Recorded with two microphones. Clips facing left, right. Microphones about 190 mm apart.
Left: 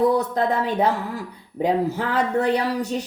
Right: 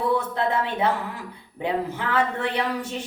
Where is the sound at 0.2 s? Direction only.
40° left (ahead or behind).